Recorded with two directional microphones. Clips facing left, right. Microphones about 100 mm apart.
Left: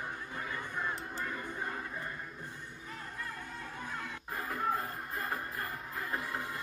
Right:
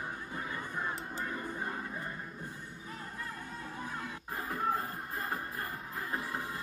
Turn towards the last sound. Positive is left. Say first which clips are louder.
# even
turn(degrees=-30)  # may be behind; listen again after turning